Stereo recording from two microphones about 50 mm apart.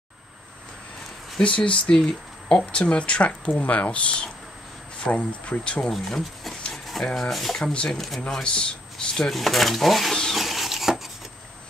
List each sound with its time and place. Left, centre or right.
1.4 s speech: left
5.9 s speech: centre
6.7 s rub: centre
7.1 s speech: centre
10.3 s printer: centre